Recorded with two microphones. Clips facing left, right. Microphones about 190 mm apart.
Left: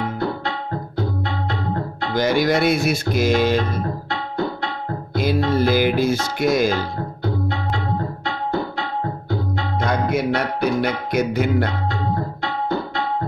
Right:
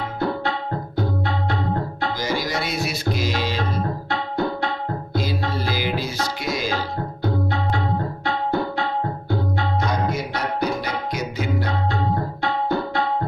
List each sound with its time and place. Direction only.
2.1 s music: 60° left (ahead or behind)
5.1 s music: 55° left (ahead or behind)
9.8 s music: 55° left (ahead or behind)